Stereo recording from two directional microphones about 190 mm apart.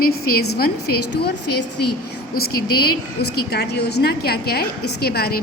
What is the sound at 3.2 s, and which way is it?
A woman's voice, 60° left (ahead or behind).